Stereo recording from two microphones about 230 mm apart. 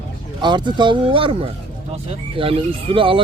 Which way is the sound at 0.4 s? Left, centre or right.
Centre.